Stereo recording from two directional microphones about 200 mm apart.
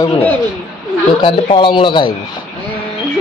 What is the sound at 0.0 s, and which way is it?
Speech, 15° left (ahead or behind).